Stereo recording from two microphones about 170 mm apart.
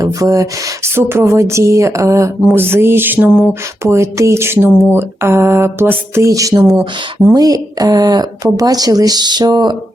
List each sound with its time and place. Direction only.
0.0 s speech: 20° right (ahead or behind)
0.9 s a sound: 15° right (ahead or behind)
6.7 s speech: 15° right (ahead or behind)